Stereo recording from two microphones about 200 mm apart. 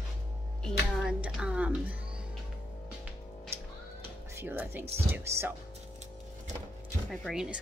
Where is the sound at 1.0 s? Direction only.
5° right (ahead or behind).